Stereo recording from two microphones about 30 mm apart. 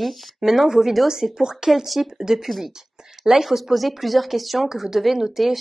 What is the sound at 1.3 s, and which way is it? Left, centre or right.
Speech, right.